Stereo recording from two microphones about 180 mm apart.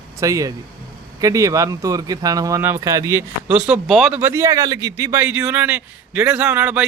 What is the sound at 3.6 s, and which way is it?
Speech, 5° right (ahead or behind).